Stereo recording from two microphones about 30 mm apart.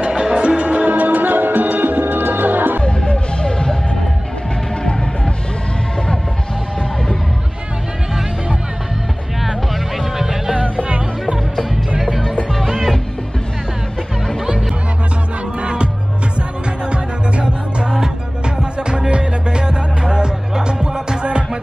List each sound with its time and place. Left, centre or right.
0.1 s music: right
0.6 s music: right
2.8 s music: left
9.4 s music: centre
12.6 s music: centre
15.6 s music: right